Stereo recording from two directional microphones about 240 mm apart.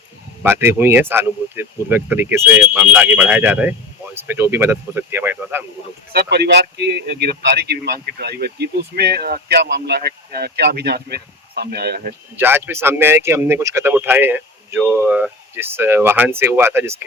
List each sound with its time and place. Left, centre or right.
0.4 s speech: centre
6.1 s speech: right
12.4 s speech: centre